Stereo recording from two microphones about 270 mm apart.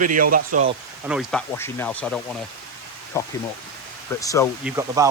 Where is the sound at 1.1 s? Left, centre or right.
Centre.